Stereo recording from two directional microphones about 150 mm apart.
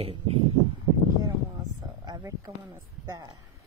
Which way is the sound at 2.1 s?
25° right (ahead or behind).